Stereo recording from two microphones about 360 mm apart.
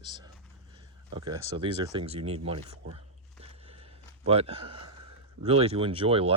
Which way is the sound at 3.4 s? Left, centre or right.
Centre.